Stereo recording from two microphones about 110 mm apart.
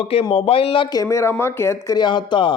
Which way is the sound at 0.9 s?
25° left (ahead or behind).